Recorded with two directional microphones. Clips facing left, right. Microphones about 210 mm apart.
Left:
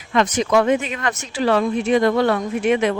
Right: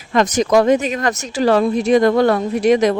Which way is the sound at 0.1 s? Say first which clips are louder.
Right 3 dB; 40° right (ahead or behind).